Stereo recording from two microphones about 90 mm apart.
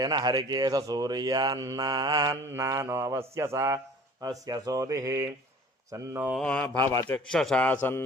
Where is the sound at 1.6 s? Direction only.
40° right (ahead or behind).